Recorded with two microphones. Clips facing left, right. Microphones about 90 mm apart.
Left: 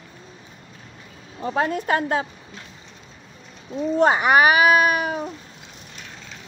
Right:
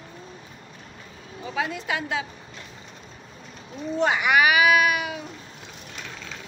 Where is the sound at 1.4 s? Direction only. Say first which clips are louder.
Left 6 dB; 45° left (ahead or behind).